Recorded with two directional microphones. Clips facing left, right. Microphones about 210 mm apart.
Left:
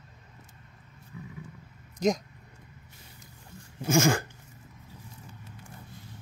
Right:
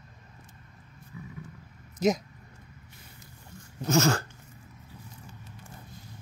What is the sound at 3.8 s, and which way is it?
Dog, 10° left (ahead or behind).